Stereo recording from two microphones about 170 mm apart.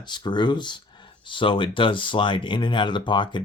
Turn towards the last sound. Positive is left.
turn(degrees=30)  # may be behind; listen again after turning